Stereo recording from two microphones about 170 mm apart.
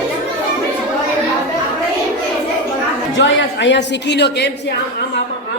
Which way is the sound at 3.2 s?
90° left.